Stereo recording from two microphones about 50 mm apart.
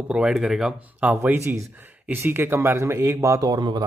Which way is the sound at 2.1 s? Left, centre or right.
Right.